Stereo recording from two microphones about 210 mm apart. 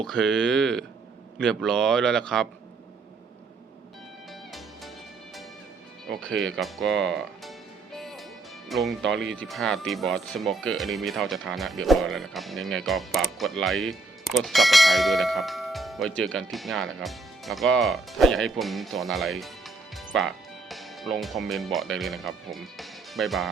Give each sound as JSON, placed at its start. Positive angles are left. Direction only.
{"t": 0.0, "sound": "speech", "side_deg": 5}
{"t": 6.1, "sound": "speech", "side_deg": 0}
{"t": 7.9, "sound": "music", "side_deg": 0}
{"t": 8.7, "sound": "speech", "side_deg": 0}
{"t": 9.0, "sound": "speech", "side_deg": -60}
{"t": 9.4, "sound": "speech", "side_deg": 0}